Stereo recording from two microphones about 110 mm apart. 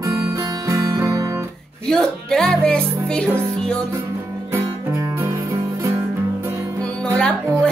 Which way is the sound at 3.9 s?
25° right (ahead or behind).